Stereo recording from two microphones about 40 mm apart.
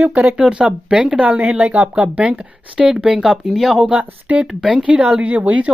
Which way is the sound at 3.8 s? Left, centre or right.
Right.